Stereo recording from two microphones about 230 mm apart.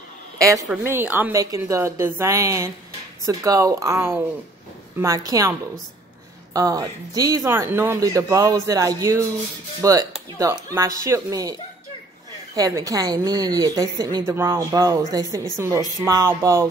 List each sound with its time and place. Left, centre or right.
0.4 s a woman's voice: centre
6.5 s a woman's voice: centre
12.5 s a woman's voice: centre